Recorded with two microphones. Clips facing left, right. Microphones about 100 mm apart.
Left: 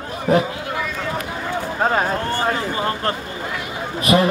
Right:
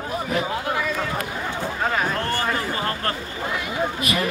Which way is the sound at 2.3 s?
25° left (ahead or behind).